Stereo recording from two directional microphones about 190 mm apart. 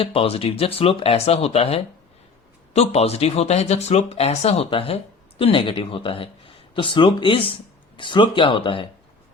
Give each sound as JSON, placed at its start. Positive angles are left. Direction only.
{"t": 0.0, "sound": "speech", "side_deg": 30}